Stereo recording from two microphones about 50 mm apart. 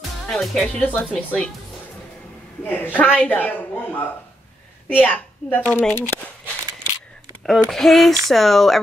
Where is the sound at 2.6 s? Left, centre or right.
Left.